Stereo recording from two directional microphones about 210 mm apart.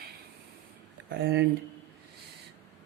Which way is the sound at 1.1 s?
55° right (ahead or behind).